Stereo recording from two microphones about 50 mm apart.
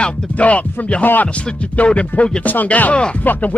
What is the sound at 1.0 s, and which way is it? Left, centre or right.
Speech, left.